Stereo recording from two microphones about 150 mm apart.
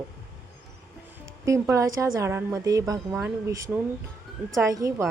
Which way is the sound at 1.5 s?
20° right (ahead or behind).